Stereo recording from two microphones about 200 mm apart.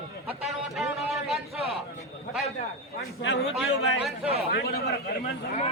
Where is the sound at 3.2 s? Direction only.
65° left (ahead or behind).